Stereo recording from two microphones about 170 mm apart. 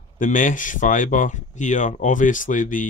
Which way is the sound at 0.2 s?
50° left (ahead or behind).